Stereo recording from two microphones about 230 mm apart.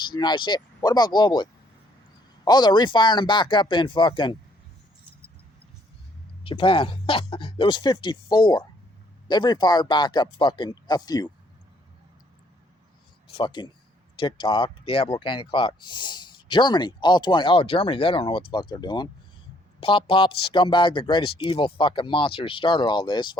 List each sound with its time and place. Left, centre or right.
0.0 s speech: centre
6.4 s speech: left
13.3 s speech: left